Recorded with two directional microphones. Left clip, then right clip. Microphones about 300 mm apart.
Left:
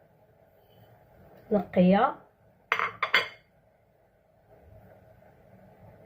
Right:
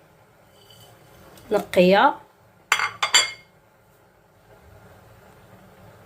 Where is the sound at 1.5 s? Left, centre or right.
Right.